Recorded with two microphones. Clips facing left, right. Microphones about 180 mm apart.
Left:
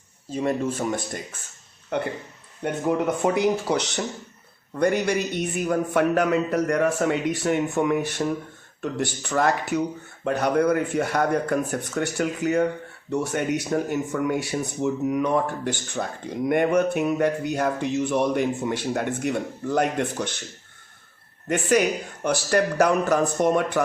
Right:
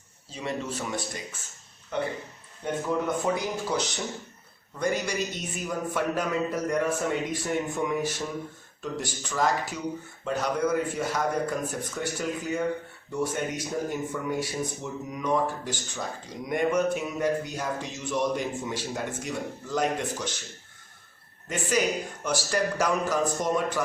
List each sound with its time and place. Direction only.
0.3 s speech: 50° left (ahead or behind)
2.6 s speech: 65° left (ahead or behind)
4.8 s speech: 60° left (ahead or behind)
22.2 s speech: 60° left (ahead or behind)